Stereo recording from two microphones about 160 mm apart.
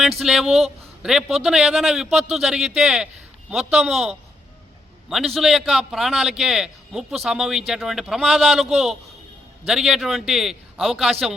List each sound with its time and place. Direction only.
0.2 s a man's voice: centre (ahead or behind)